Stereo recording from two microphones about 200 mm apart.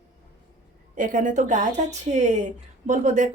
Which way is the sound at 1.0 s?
40° right (ahead or behind).